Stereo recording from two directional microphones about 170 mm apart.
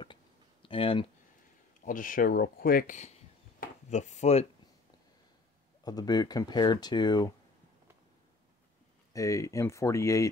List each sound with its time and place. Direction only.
0.0 s a sound: 30° left (ahead or behind)
1.9 s speech: 55° left (ahead or behind)
3.9 s speech: 45° left (ahead or behind)
5.9 s speech: 25° left (ahead or behind)
9.1 s speech: 20° left (ahead or behind)